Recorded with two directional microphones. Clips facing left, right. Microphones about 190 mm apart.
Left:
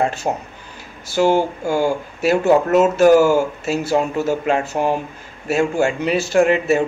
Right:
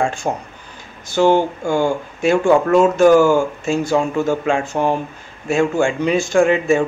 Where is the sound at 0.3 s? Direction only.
10° left (ahead or behind).